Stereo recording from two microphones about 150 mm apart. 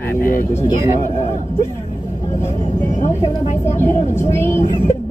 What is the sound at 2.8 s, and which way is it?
Speech, 55° left (ahead or behind).